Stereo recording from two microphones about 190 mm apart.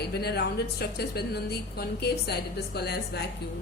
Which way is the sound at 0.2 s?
55° left (ahead or behind).